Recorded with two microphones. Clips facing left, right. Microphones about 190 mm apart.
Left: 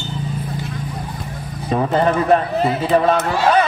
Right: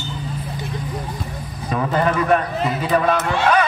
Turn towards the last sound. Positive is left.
turn(degrees=30)  # may be behind; listen again after turning